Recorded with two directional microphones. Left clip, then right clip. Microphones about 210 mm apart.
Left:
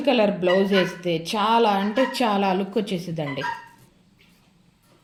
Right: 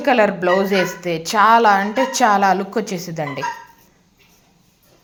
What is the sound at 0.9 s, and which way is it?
A woman's voice, 20° right (ahead or behind).